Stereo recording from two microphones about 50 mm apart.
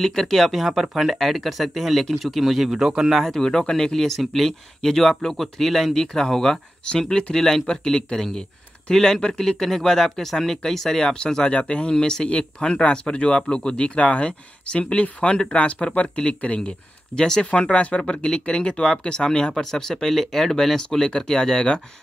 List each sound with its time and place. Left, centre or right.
0.0 s speech: centre
3.3 s speech: centre